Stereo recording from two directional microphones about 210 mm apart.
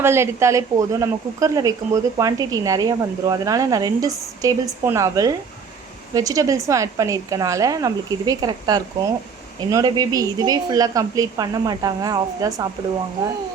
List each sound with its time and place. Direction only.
0.0 s speech: 10° right (ahead or behind)